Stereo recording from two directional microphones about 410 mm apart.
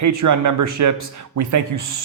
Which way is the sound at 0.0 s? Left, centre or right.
Right.